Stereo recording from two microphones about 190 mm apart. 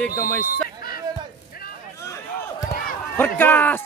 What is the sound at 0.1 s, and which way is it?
Speech, 10° left (ahead or behind).